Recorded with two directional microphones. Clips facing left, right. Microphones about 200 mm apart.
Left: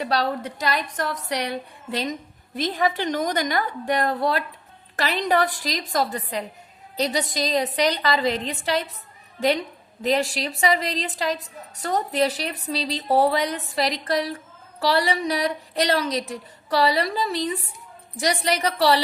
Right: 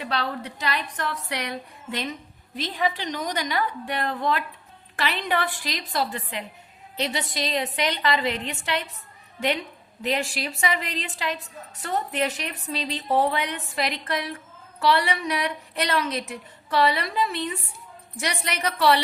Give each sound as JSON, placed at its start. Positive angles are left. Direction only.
{"t": 0.0, "sound": "a woman's voice", "side_deg": 40}
{"t": 2.6, "sound": "a woman's voice", "side_deg": 45}